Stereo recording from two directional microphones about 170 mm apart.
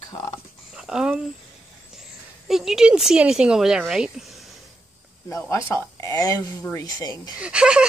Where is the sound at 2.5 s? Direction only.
Centre (ahead or behind).